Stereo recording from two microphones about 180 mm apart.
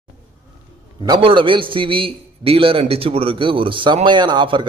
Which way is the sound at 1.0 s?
25° right (ahead or behind).